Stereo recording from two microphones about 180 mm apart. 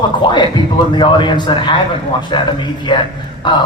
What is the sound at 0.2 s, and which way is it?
A man's voice, 25° left (ahead or behind).